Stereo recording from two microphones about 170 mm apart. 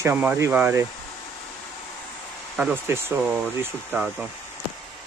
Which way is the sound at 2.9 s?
15° right (ahead or behind).